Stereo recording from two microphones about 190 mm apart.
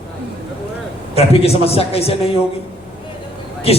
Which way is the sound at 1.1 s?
30° left (ahead or behind).